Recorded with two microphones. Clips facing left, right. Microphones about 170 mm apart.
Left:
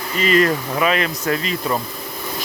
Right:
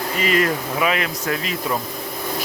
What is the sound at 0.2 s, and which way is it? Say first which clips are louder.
Speech: left 4 dB; 10° right (ahead or behind).